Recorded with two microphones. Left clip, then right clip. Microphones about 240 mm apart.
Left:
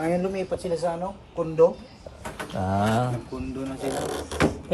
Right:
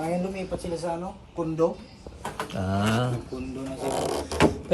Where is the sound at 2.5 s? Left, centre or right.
Centre.